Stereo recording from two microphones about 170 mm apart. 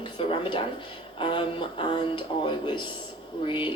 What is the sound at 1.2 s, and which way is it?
Speech, 30° left (ahead or behind).